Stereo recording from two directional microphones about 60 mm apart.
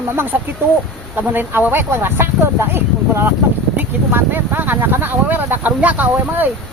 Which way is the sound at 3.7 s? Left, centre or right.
Right.